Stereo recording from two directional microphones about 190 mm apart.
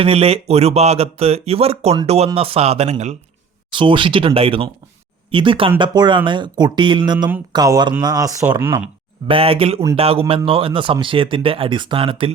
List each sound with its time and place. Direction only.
0.0 s speech: 30° right (ahead or behind)
3.7 s speech: 25° right (ahead or behind)
9.2 s speech: 30° right (ahead or behind)